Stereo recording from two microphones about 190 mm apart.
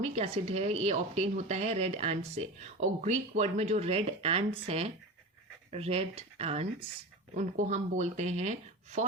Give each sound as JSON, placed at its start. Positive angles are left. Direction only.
{"t": 0.0, "sound": "speech", "side_deg": -35}